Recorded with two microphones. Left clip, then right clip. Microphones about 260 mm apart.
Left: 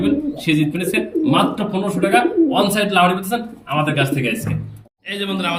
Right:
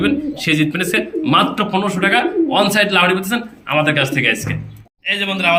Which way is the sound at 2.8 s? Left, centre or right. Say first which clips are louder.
Right 2 dB; right.